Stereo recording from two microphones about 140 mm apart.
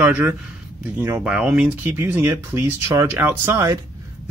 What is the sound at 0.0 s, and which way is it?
Speech, 15° right (ahead or behind).